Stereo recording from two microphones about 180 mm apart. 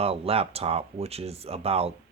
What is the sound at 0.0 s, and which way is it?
Speech, 35° right (ahead or behind).